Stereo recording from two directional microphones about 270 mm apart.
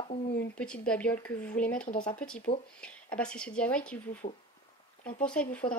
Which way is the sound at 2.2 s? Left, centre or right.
Centre.